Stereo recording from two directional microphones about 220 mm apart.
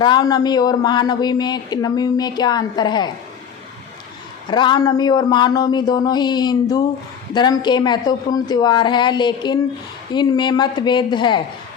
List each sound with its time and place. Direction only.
0.0 s speech: 20° left (ahead or behind)
4.4 s speech: 20° left (ahead or behind)